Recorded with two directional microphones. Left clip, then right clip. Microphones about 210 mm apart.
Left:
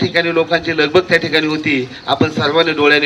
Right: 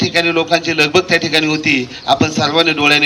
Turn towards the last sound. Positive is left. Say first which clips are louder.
# even
turn(degrees=-50)  # may be behind; listen again after turning